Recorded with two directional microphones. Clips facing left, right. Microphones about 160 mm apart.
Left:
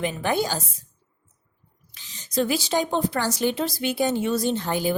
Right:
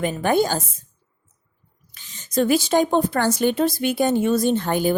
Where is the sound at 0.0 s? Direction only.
50° right (ahead or behind).